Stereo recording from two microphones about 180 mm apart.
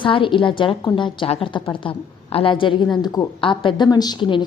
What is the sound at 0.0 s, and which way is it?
A woman's voice, 25° left (ahead or behind).